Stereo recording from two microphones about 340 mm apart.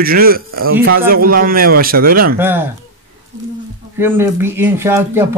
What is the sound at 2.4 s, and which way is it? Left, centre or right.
Speech, centre.